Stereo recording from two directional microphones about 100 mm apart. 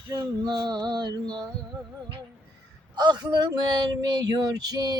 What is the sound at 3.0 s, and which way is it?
Speech, 45° right (ahead or behind).